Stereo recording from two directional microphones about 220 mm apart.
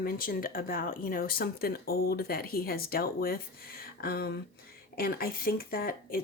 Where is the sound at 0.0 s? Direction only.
40° left (ahead or behind).